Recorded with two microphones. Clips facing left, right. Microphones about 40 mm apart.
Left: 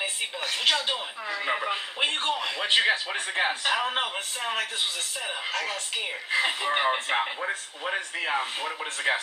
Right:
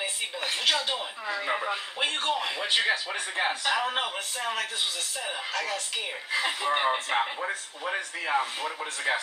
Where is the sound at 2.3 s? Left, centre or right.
Centre.